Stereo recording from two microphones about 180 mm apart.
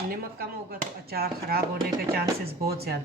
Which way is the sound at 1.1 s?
60° right (ahead or behind).